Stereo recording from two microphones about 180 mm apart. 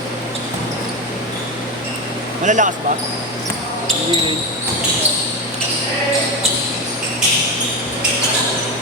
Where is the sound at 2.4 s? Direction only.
45° right (ahead or behind).